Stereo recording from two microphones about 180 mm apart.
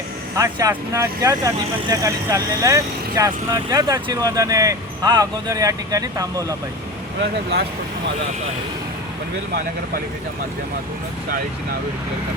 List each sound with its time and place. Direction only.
0.3 s speech: 15° right (ahead or behind)